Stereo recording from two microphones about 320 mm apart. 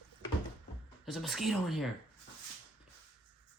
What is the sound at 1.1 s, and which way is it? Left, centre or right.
Speech, centre.